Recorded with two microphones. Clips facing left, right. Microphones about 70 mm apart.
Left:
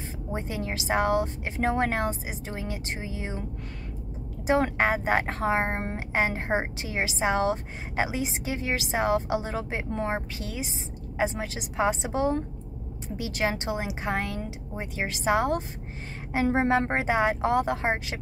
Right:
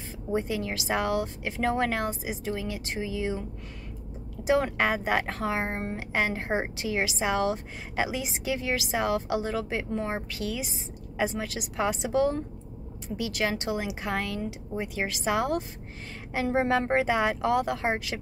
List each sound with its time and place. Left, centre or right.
0.3 s a woman's voice: left
4.5 s a woman's voice: left